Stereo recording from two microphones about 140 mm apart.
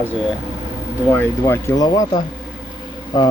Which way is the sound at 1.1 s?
20° left (ahead or behind).